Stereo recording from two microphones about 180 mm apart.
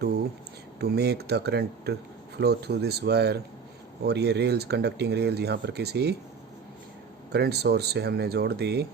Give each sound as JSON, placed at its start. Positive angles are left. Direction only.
{"t": 0.8, "sound": "speech", "side_deg": -65}
{"t": 7.3, "sound": "speech", "side_deg": -65}